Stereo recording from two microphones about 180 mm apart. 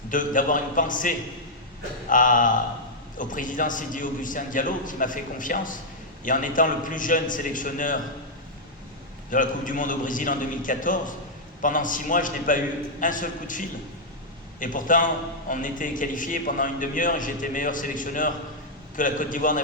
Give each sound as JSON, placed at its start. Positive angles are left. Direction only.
{"t": 0.1, "sound": "a man's voice", "side_deg": 45}
{"t": 9.3, "sound": "a man's voice", "side_deg": 45}